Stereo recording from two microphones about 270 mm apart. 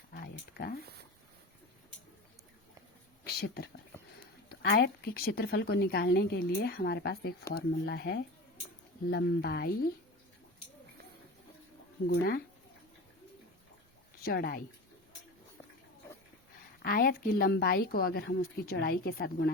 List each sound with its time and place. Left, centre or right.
0.1 s a sound: left
3.2 s a woman's voice: left
12.0 s a woman's voice: left
14.3 s a woman's voice: left
16.8 s a woman's voice: left